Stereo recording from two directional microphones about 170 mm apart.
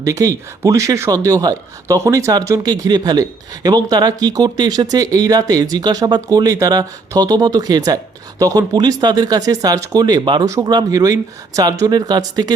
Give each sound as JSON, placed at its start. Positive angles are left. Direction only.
{"t": 0.0, "sound": "speech", "side_deg": -20}